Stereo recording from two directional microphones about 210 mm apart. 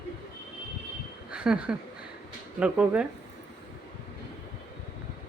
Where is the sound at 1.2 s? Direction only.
5° right (ahead or behind).